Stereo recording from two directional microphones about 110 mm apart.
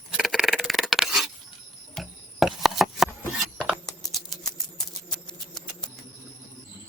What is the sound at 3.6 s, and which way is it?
Computer keyboard, centre (ahead or behind).